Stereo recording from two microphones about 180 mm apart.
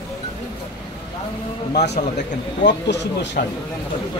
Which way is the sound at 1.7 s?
70° left (ahead or behind).